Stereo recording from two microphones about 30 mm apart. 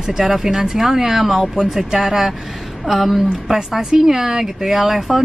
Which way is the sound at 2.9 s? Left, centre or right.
Centre.